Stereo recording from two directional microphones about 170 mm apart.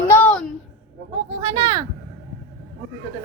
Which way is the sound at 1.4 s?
20° right (ahead or behind).